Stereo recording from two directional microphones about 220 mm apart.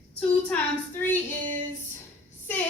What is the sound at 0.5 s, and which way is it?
Speech, 5° left (ahead or behind).